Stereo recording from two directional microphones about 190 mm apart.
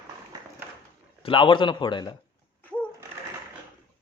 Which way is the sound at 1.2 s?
25° left (ahead or behind).